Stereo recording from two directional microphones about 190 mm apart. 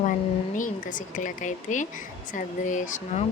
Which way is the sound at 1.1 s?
40° left (ahead or behind).